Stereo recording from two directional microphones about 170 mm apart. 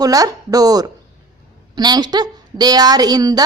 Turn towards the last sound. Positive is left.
turn(degrees=-25)  # may be behind; listen again after turning